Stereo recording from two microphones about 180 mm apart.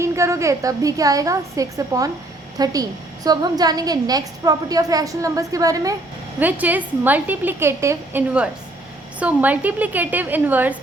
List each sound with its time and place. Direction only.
0.0 s a woman's voice: 15° right (ahead or behind)